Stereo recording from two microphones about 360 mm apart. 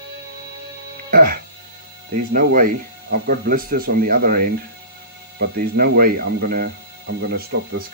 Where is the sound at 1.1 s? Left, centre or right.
Right.